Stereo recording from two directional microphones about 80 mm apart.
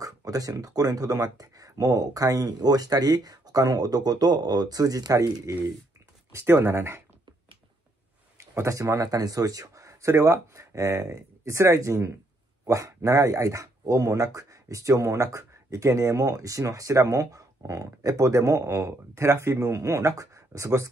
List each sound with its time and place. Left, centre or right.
0.0 s speech: right
6.3 s speech: right
8.4 s speech: right